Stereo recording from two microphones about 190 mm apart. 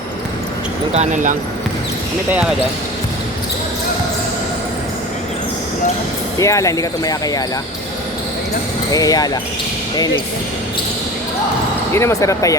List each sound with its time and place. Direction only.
0.9 s speech: 40° right (ahead or behind)
6.4 s speech: 15° left (ahead or behind)
8.9 s speech: 20° left (ahead or behind)
11.9 s speech: 15° left (ahead or behind)